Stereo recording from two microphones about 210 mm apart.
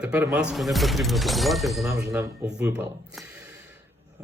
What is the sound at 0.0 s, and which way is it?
Speech, 5° right (ahead or behind).